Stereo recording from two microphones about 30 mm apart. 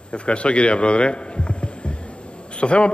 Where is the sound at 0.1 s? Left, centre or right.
Left.